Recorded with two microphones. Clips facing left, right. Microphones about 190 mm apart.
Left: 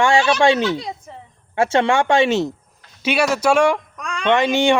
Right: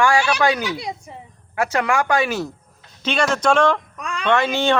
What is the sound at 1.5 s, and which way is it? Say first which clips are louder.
Speech: left 4 dB; 25° left (ahead or behind).